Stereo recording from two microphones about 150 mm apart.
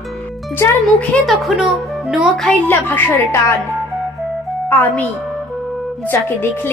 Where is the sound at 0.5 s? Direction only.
15° left (ahead or behind).